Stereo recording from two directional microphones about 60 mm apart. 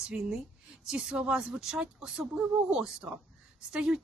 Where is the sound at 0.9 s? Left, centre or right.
Centre.